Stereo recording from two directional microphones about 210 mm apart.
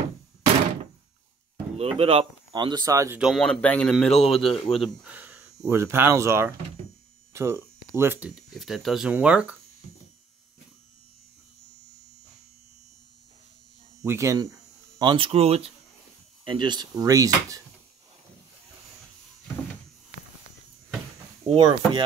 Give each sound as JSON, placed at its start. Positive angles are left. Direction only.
{"t": 1.8, "sound": "speech", "side_deg": -25}
{"t": 3.2, "sound": "speech", "side_deg": 0}
{"t": 14.0, "sound": "speech", "side_deg": -15}
{"t": 21.5, "sound": "speech", "side_deg": -25}